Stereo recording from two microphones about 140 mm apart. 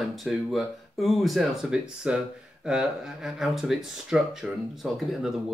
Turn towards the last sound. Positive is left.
turn(degrees=0)  # may be behind; listen again after turning